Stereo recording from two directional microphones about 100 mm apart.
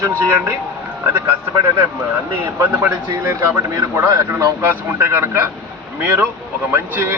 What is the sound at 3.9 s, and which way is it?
Speech, 25° right (ahead or behind).